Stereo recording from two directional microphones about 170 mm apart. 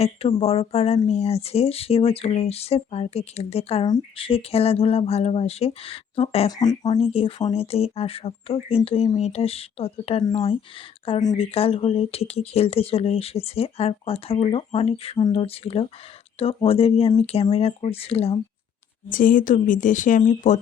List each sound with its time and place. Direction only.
0.0 s speech: 35° left (ahead or behind)
6.5 s speech: 20° left (ahead or behind)
7.0 s speech: 35° left (ahead or behind)
19.0 s speech: 55° left (ahead or behind)